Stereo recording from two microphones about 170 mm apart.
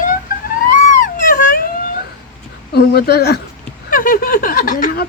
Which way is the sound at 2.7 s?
70° left (ahead or behind).